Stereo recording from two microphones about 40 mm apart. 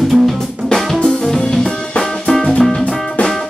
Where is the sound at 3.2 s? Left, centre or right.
Left.